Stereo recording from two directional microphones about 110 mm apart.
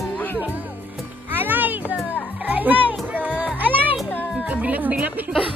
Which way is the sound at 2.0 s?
15° right (ahead or behind).